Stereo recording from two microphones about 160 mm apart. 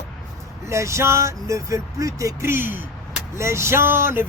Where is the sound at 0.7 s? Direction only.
20° right (ahead or behind).